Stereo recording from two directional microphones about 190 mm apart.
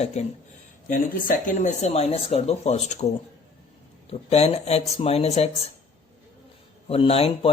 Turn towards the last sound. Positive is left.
turn(degrees=30)  # may be behind; listen again after turning